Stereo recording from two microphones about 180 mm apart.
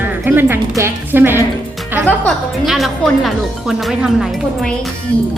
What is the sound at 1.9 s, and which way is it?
Music, 10° right (ahead or behind).